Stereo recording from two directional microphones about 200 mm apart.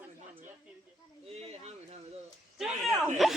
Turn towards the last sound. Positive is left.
turn(degrees=0)  # may be behind; listen again after turning